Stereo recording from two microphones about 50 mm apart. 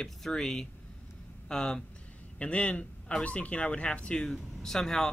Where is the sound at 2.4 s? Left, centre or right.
Left; by 5.1 s centre.